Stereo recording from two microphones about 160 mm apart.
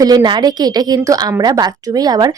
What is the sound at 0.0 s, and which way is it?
A woman's voice, 25° right (ahead or behind).